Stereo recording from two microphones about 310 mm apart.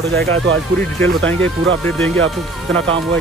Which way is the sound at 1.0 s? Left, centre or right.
Centre.